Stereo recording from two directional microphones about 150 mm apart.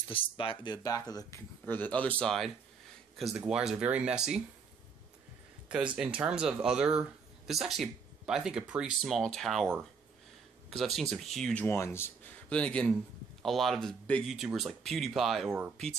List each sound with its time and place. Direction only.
0.1 s speech: 35° left (ahead or behind)
1.7 s speech: 10° left (ahead or behind); by 4.4 s 5° right (ahead or behind)
5.7 s speech: 5° right (ahead or behind)
11.6 s speech: 15° left (ahead or behind); by 15.5 s centre (ahead or behind)